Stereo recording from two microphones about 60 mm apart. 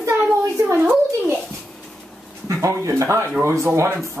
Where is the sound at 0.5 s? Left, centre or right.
Right.